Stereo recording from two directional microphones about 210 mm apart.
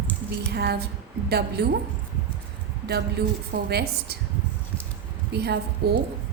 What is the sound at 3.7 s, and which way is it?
Speech, 50° right (ahead or behind).